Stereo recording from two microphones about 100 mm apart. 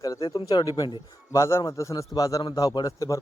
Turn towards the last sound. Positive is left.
turn(degrees=35)  # may be behind; listen again after turning